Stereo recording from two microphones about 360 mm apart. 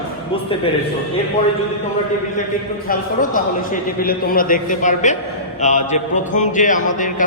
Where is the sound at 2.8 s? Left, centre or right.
Left.